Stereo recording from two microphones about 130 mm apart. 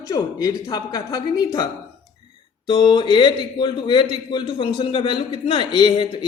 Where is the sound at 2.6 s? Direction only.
35° left (ahead or behind).